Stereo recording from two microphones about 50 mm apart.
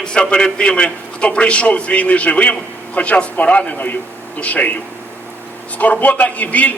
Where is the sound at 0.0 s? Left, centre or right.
Left.